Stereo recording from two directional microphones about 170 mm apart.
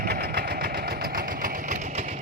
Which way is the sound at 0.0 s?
70° right (ahead or behind).